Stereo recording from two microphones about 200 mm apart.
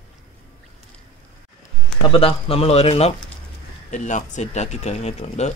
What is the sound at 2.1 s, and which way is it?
Speech, 30° left (ahead or behind).